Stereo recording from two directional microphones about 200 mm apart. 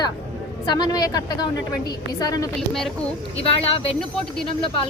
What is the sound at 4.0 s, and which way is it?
Speech, 5° left (ahead or behind).